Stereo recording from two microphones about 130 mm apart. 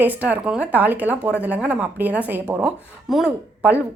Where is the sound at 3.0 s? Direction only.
Centre (ahead or behind).